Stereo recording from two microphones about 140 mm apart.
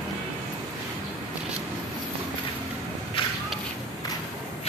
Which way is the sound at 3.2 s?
40° left (ahead or behind).